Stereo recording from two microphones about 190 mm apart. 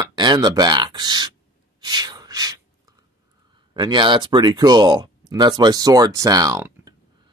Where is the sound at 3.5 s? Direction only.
25° right (ahead or behind).